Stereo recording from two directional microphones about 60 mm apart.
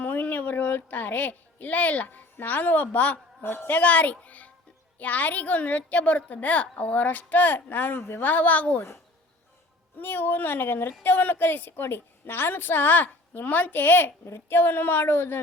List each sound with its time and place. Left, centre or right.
0.0 s a woman's voice: left
10.0 s a woman's voice: left
14.3 s speech: left
14.6 s a woman's voice: left